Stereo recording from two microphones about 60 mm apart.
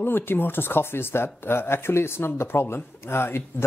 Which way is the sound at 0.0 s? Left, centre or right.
Left.